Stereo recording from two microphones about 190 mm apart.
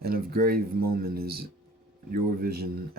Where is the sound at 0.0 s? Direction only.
55° right (ahead or behind).